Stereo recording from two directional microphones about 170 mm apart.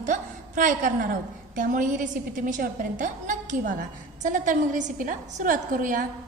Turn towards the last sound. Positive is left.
turn(degrees=-50)  # may be behind; listen again after turning